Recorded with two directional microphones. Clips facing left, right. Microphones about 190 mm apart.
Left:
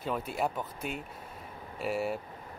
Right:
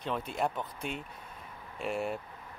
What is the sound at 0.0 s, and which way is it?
Speech, 5° left (ahead or behind).